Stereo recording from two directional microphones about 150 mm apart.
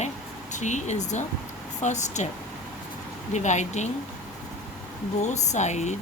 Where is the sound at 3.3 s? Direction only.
50° left (ahead or behind).